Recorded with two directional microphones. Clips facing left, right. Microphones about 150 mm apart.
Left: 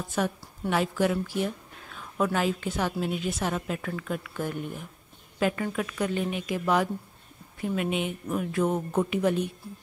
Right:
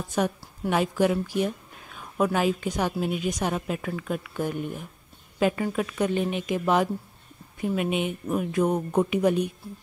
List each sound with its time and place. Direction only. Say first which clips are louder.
0.1 s a woman's voice: right 3 dB; 20° right (ahead or behind)